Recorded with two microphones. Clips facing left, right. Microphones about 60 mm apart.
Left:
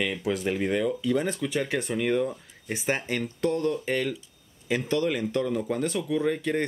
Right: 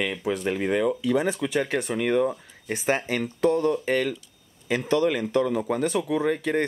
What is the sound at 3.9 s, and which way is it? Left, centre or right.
Speech, right.